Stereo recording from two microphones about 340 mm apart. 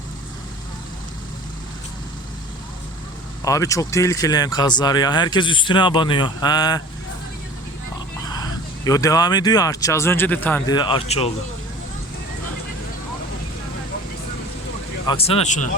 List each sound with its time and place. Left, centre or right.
3.4 s speech: centre
8.3 s speech: centre
15.0 s speech: centre